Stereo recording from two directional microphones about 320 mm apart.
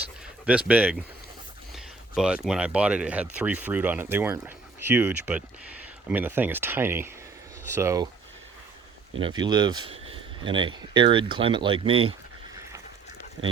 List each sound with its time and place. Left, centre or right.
0.7 s speech: centre
9.2 s speech: centre
13.4 s speech: right